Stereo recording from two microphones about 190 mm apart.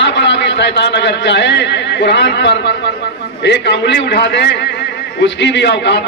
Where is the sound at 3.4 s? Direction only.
65° left (ahead or behind).